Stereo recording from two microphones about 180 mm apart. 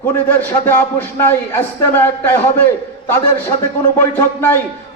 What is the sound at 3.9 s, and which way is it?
Speech, 10° left (ahead or behind).